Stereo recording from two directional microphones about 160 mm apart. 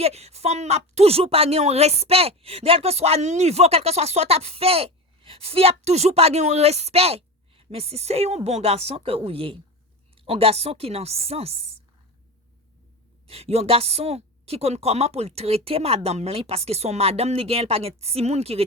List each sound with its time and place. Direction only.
0.0 s a woman's voice: 40° right (ahead or behind)
13.2 s a woman's voice: 40° right (ahead or behind)